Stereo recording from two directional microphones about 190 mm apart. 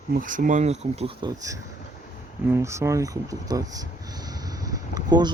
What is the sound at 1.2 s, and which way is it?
Speech, 15° right (ahead or behind).